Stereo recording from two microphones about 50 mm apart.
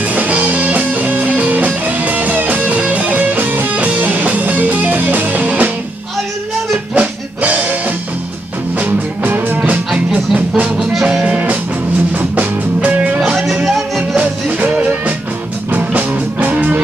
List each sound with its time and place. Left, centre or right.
0.1 s music: right
7.0 s music: right
8.7 s music: right
9.9 s music: right
10.8 s music: centre
12.2 s music: right
13.7 s music: centre
14.2 s music: right